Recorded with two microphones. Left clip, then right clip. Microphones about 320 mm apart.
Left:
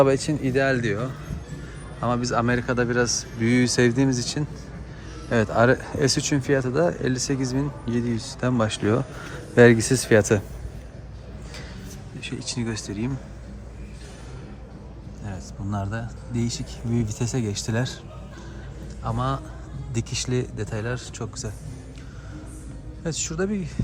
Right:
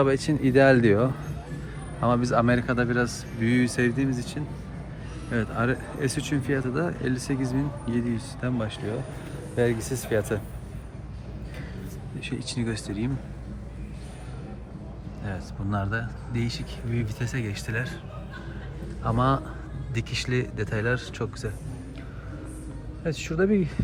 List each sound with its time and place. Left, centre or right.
0.0 s speech: centre
12.2 s speech: centre
15.2 s speech: centre
19.0 s speech: centre
23.0 s speech: centre